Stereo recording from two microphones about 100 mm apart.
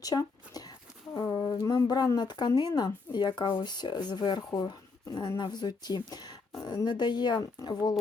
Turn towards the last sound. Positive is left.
turn(degrees=45)  # may be behind; listen again after turning